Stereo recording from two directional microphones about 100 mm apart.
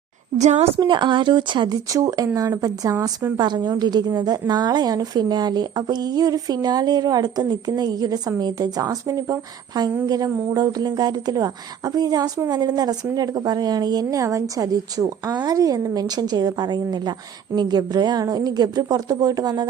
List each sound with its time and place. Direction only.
0.8 s a woman's voice: 50° right (ahead or behind)